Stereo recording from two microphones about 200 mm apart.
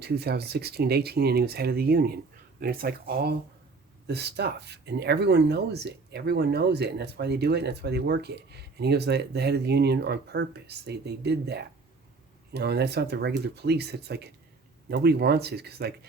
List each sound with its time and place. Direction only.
0.0 s speech: 55° right (ahead or behind)